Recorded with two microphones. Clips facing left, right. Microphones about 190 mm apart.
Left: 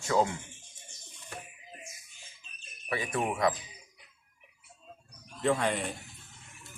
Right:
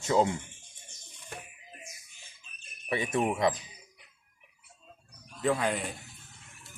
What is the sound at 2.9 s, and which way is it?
Speech, 25° right (ahead or behind).